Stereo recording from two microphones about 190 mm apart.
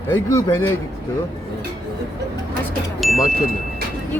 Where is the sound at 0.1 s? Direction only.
20° left (ahead or behind).